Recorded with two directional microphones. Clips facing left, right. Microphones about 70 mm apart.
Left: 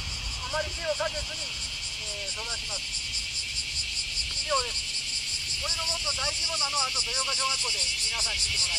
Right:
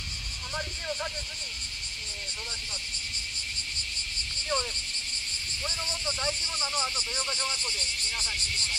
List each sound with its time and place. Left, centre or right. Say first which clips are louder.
0.5 s speech: left 5 dB; centre
4.5 s speech: left 3 dB; centre
5.9 s speech: right 3 dB; centre
7.2 s speech: left 5 dB; right